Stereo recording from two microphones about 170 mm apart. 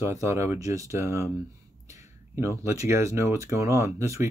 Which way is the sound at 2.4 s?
15° right (ahead or behind).